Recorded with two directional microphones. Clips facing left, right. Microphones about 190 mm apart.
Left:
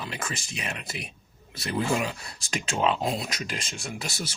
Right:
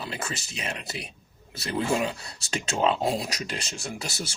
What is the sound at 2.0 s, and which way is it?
Speech, 30° right (ahead or behind).